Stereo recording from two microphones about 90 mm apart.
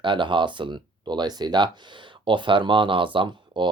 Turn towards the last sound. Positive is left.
turn(degrees=-65)  # may be behind; listen again after turning